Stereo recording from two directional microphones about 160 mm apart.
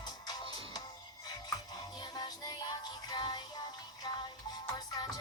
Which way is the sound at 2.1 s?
25° left (ahead or behind).